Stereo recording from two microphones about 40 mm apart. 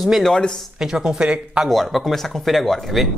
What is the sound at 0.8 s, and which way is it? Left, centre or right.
Speech, centre.